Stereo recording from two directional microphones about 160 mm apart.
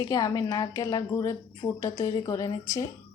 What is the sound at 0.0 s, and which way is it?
Speech, 25° left (ahead or behind).